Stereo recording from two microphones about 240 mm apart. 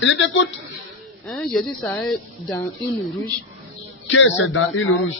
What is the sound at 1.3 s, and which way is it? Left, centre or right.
Speech, centre.